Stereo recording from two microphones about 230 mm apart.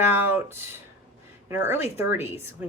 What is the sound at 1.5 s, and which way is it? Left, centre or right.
Speech, centre.